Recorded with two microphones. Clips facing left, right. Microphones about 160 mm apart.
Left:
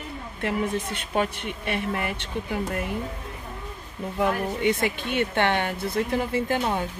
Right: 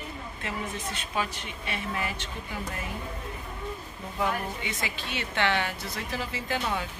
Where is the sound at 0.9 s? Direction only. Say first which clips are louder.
Left 6 dB; 55° left (ahead or behind).